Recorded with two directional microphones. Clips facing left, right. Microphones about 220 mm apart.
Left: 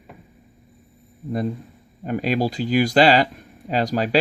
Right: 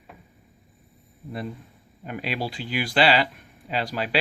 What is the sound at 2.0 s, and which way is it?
Speech, 40° left (ahead or behind).